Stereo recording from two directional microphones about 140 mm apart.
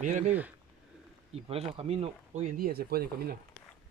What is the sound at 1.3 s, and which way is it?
Speech, 45° right (ahead or behind).